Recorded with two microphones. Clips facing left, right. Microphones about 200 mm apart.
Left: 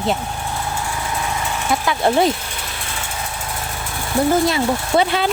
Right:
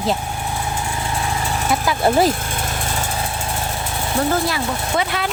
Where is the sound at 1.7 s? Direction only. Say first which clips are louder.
Even; centre (ahead or behind).